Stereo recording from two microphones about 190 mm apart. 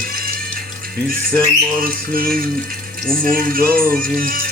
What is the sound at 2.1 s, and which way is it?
Music, 50° right (ahead or behind).